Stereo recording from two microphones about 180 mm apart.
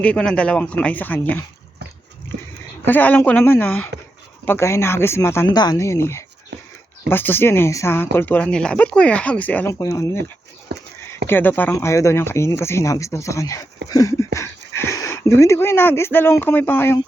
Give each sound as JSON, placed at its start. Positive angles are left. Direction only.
{"t": 0.0, "sound": "speech", "side_deg": 5}
{"t": 2.8, "sound": "speech", "side_deg": 10}
{"t": 10.7, "sound": "a sound", "side_deg": -70}
{"t": 11.3, "sound": "speech", "side_deg": 10}
{"t": 13.9, "sound": "a sound", "side_deg": 15}
{"t": 14.8, "sound": "speech", "side_deg": 15}